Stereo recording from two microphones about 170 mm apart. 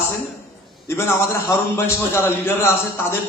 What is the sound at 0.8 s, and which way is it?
A man's voice, 15° left (ahead or behind).